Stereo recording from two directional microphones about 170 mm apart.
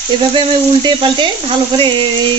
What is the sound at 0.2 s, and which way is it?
Sizzle, 25° right (ahead or behind).